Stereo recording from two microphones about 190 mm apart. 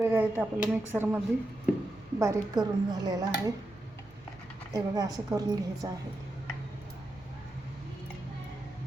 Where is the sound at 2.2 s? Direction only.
15° right (ahead or behind).